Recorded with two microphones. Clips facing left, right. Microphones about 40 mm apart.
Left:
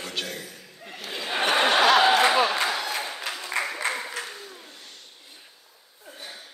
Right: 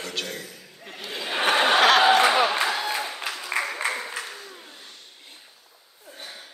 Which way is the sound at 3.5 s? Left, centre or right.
Right.